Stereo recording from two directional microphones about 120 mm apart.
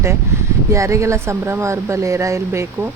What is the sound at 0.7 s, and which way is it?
Speech, 25° right (ahead or behind).